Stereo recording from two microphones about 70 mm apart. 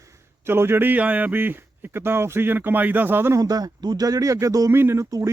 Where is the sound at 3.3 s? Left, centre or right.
Right.